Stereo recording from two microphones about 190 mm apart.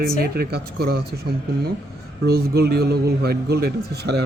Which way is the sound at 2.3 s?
55° right (ahead or behind).